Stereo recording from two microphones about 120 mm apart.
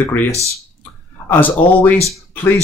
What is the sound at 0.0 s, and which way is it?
Speech, 15° left (ahead or behind).